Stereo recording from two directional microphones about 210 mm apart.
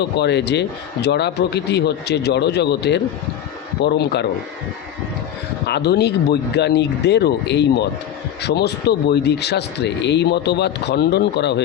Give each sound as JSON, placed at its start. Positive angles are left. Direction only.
{"t": 0.0, "sound": "speech", "side_deg": 55}
{"t": 5.6, "sound": "speech", "side_deg": 50}